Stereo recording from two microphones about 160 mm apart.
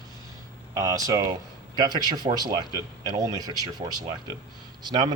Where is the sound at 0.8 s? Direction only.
20° right (ahead or behind).